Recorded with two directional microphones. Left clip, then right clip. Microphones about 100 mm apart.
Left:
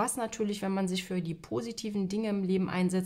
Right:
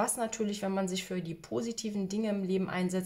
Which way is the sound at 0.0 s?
55° left (ahead or behind).